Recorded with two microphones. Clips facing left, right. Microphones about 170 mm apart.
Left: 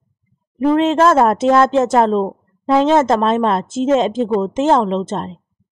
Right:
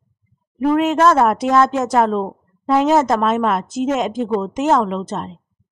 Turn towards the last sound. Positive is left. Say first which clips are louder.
# left 4 dB
turn(degrees=30)  # may be behind; listen again after turning